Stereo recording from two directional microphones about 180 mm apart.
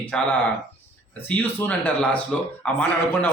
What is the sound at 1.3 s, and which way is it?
A man's voice, 10° left (ahead or behind).